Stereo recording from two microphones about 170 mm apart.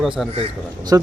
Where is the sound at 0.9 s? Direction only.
15° right (ahead or behind).